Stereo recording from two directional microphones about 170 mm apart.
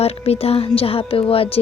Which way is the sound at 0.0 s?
35° left (ahead or behind).